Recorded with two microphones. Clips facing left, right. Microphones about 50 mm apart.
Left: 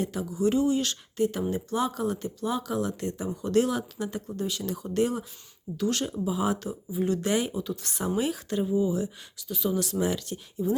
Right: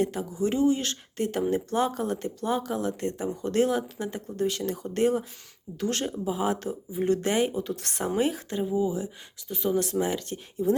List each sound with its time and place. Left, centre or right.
0.0 s speech: right
1.1 s speech: right
4.4 s speech: right
7.8 s speech: right
8.0 s speech: right
8.5 s speech: right
9.5 s speech: right